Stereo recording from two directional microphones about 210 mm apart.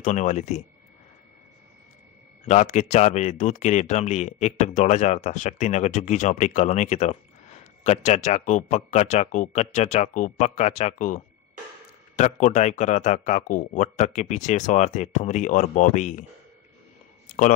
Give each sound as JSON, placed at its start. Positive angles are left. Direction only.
{"t": 0.0, "sound": "speech", "side_deg": 35}
{"t": 2.4, "sound": "speech", "side_deg": 35}